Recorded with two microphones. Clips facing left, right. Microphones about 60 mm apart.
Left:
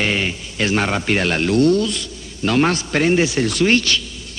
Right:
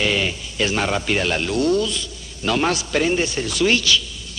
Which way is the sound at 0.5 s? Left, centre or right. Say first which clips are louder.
Left 2 dB; left.